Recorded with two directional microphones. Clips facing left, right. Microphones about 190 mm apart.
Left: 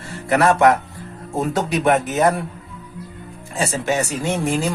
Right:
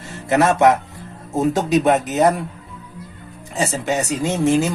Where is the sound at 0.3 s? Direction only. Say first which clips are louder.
Even; 20° right (ahead or behind).